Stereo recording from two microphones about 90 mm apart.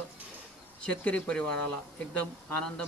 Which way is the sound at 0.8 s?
15° left (ahead or behind).